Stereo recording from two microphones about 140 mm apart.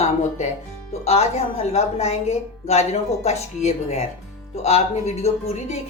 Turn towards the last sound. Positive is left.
turn(degrees=50)  # may be behind; listen again after turning